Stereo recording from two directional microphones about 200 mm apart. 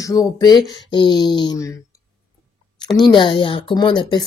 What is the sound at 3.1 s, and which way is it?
Speech, 25° left (ahead or behind).